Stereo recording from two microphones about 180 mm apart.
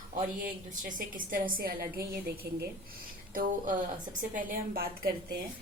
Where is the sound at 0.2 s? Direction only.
50° right (ahead or behind).